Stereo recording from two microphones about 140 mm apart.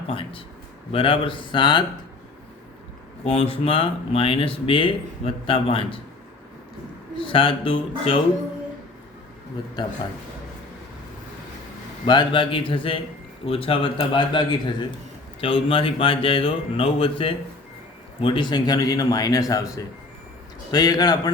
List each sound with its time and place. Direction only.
0.1 s speech: 40° left (ahead or behind)
3.2 s speech: 45° left (ahead or behind)
7.2 s speech: 40° left (ahead or behind)
9.8 s speech: 35° left (ahead or behind)
12.0 s a man's voice: 35° left (ahead or behind)